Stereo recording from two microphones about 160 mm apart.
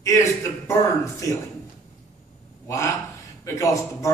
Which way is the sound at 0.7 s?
20° left (ahead or behind).